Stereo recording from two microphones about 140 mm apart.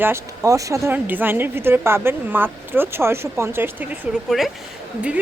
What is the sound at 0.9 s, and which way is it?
Speech, 10° right (ahead or behind).